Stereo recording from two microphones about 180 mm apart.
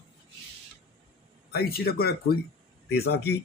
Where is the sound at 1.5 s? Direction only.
55° left (ahead or behind).